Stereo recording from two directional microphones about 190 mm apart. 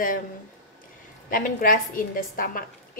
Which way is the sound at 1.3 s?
50° left (ahead or behind).